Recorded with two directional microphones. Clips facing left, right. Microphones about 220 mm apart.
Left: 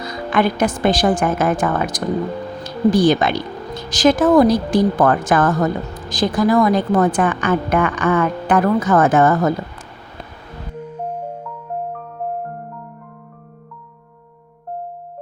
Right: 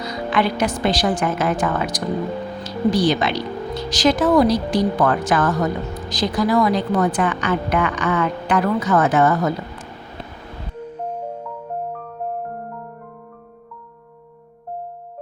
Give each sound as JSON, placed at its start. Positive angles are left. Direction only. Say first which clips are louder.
{"t": 0.0, "sound": "a woman's voice", "louder": "left 2 dB", "side_deg": 50}
{"t": 11.0, "sound": "music", "louder": "left 1 dB", "side_deg": 10}